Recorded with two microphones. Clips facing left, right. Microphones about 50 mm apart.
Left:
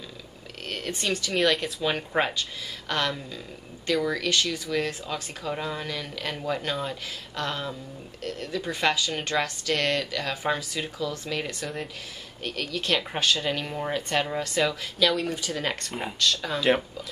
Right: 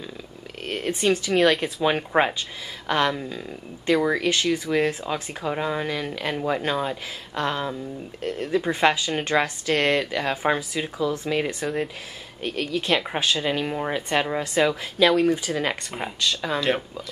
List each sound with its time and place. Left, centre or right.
0.7 s speech: centre
1.4 s speech: centre
1.8 s speech: centre
15.5 s speech: centre